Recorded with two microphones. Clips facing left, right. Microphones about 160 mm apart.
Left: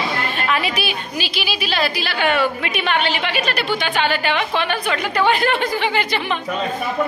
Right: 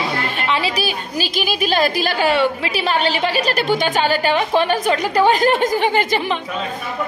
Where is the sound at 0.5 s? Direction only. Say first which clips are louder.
Right 2 dB; 35° right (ahead or behind).